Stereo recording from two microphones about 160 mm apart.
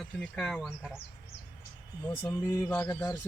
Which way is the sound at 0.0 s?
Centre (ahead or behind).